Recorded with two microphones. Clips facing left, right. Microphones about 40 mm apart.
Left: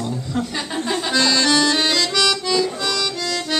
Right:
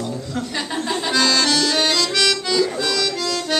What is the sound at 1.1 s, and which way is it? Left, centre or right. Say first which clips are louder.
Music: left 1 dB; centre.